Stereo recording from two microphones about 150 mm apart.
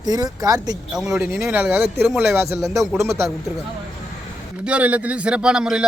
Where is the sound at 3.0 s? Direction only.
20° right (ahead or behind).